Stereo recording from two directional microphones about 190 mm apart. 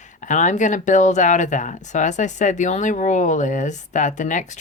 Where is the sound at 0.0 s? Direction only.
40° left (ahead or behind).